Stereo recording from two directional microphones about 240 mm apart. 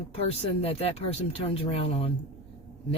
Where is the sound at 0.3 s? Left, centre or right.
Left.